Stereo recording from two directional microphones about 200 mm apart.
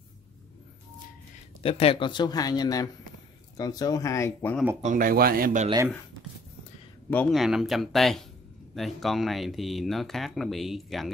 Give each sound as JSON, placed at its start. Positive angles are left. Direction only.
{"t": 1.6, "sound": "speech", "side_deg": 30}
{"t": 4.8, "sound": "a man's voice", "side_deg": -45}
{"t": 7.1, "sound": "speech", "side_deg": 5}